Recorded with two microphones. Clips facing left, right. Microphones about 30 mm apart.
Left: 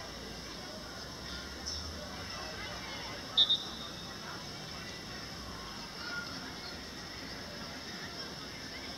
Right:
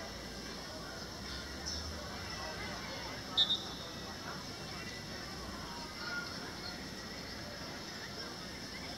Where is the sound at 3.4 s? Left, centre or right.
Centre.